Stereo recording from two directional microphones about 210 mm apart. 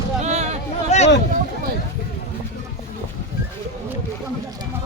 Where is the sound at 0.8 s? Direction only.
30° left (ahead or behind).